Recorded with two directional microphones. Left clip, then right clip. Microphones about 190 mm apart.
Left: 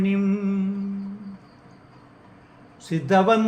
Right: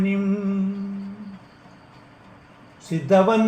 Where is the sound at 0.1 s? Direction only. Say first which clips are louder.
Even; 15° left (ahead or behind).